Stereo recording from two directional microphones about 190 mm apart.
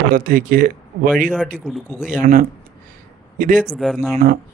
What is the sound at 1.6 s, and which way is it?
Speech, centre (ahead or behind).